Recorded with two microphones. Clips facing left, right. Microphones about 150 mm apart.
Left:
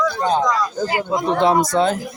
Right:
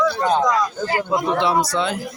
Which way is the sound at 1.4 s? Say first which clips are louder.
Left 4 dB; 50° left (ahead or behind).